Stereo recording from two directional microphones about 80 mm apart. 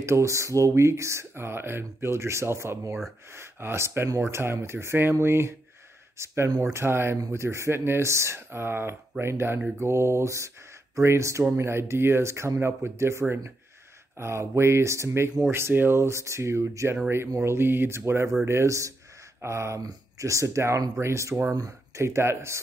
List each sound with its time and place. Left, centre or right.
0.0 s speech: right